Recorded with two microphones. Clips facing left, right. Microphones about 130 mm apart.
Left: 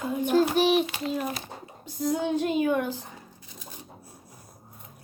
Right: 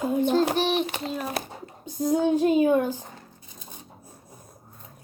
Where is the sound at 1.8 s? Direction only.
15° right (ahead or behind).